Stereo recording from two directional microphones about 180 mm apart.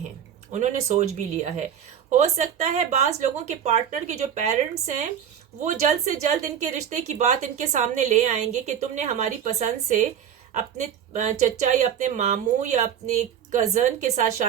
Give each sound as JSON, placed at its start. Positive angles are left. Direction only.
{"t": 0.5, "sound": "a woman's voice", "side_deg": -40}
{"t": 5.6, "sound": "a woman's voice", "side_deg": -40}